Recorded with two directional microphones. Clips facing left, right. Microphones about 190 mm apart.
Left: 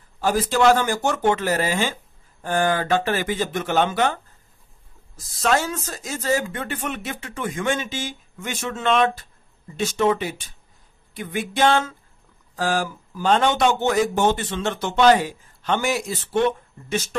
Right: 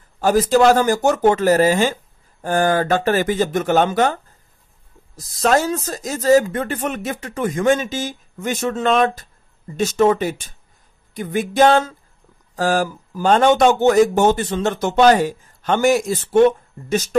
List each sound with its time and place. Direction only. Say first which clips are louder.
0.2 s speech: right 5 dB; 40° right (ahead or behind)